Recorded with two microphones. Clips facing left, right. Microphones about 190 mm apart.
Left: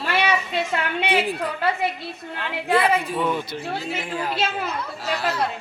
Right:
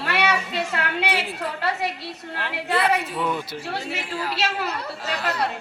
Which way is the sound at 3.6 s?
75° right (ahead or behind).